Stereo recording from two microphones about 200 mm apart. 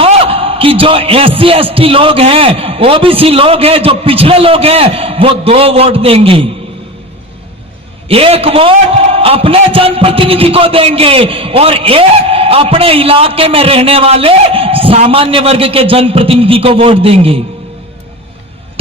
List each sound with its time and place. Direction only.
0.0 s a man's voice: 30° right (ahead or behind)
8.0 s a man's voice: 30° right (ahead or behind)